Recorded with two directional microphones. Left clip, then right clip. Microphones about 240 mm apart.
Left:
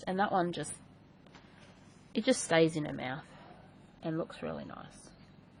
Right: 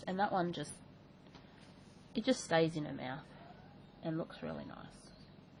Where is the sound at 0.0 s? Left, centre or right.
Left.